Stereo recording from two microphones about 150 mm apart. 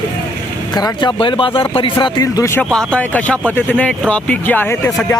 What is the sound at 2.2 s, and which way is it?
Speech, 20° left (ahead or behind).